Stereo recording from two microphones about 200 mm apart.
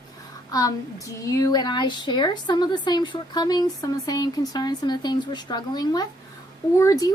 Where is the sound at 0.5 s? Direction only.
15° left (ahead or behind).